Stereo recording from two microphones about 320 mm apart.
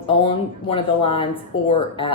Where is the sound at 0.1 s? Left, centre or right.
Centre.